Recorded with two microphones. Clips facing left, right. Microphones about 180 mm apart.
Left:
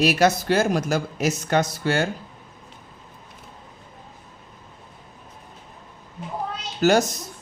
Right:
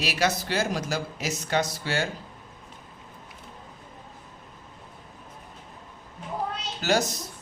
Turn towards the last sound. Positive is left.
turn(degrees=45)  # may be behind; listen again after turning